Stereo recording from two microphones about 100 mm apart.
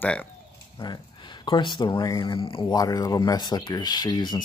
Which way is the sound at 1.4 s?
50° left (ahead or behind).